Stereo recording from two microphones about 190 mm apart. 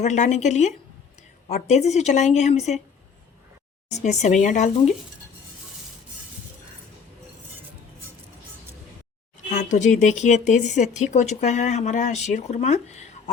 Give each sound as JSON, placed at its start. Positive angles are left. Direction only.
{"t": 0.0, "sound": "speech", "side_deg": 40}
{"t": 3.9, "sound": "speech", "side_deg": 35}
{"t": 9.5, "sound": "speech", "side_deg": 40}